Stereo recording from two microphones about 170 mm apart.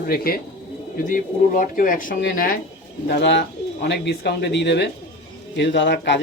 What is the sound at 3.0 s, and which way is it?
A man's voice, 85° left.